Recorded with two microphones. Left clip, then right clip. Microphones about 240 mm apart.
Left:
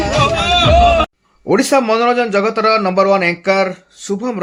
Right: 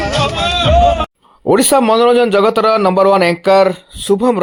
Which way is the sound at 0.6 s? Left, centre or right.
Right.